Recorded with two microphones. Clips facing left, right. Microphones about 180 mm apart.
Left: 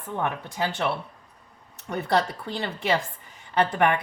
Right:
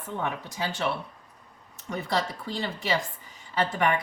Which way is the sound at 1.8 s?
60° left (ahead or behind).